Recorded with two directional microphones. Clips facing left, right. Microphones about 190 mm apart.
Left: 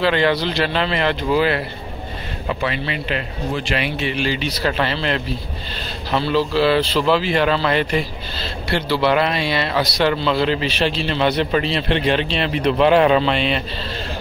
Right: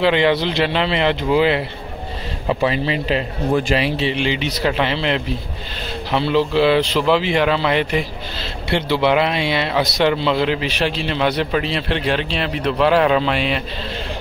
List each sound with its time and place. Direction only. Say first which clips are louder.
0.0 s speech: right 2 dB; 20° right (ahead or behind)
2.7 s speech: right 4 dB; 35° right (ahead or behind); by 13.6 s 5° right (ahead or behind)